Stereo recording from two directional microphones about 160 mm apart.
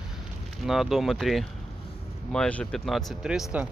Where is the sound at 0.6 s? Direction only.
Centre (ahead or behind).